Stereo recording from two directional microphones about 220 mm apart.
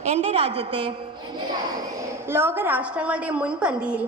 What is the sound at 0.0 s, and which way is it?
Speech, 30° right (ahead or behind).